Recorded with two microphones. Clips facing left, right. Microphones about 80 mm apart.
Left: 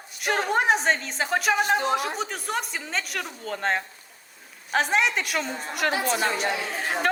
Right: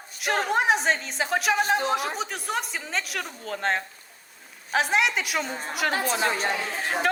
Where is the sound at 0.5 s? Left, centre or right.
Centre.